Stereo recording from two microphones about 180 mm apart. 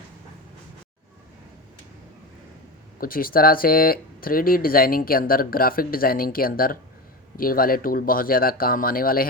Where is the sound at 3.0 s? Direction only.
55° left (ahead or behind).